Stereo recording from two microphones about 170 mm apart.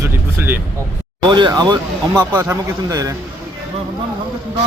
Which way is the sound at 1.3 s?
25° right (ahead or behind).